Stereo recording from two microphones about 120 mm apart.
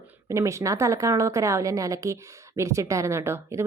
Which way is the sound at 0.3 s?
25° right (ahead or behind).